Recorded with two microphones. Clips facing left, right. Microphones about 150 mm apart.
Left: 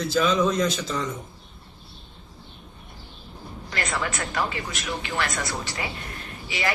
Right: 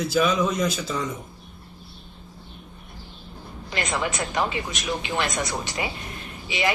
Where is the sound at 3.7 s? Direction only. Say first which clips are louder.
Right 2 dB; 20° right (ahead or behind).